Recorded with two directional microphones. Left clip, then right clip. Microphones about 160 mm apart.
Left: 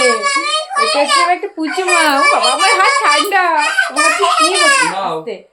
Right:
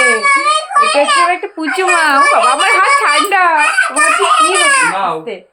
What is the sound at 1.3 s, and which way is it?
A child's voice, 20° right (ahead or behind).